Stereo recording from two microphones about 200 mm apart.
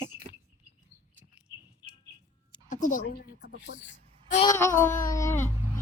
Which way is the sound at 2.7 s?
40° left (ahead or behind).